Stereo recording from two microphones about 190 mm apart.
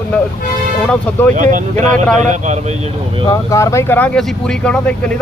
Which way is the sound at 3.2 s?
15° left (ahead or behind).